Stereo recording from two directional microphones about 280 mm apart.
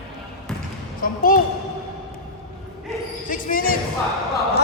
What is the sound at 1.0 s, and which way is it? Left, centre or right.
Speech, left.